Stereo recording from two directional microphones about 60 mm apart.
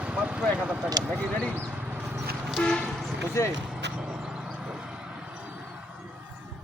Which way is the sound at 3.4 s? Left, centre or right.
Left.